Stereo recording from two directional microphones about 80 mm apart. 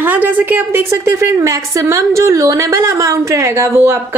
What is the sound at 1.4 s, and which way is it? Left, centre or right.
A woman's voice, right.